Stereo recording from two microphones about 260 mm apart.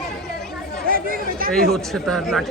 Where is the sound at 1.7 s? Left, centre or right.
Centre.